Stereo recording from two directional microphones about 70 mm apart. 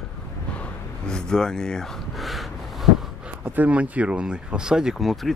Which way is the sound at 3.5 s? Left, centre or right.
Right.